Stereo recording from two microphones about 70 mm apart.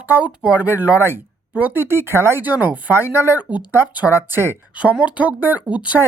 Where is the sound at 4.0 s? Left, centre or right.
Right.